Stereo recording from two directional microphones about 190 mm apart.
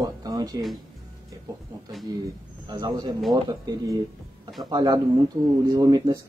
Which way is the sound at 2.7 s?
20° right (ahead or behind).